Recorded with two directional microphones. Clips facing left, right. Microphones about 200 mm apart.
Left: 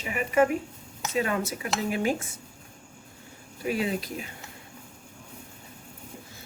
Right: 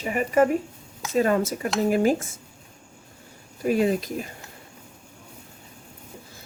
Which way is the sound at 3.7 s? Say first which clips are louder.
Right 6 dB; 45° right (ahead or behind).